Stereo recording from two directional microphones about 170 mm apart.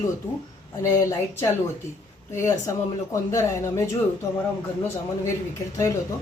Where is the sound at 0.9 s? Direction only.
20° left (ahead or behind).